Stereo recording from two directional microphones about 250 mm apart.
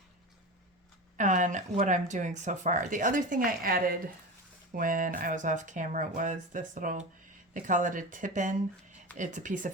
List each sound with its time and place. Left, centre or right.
1.1 s speech: right